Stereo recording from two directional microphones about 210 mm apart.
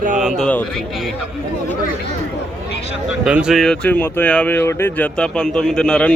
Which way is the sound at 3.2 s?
5° right (ahead or behind).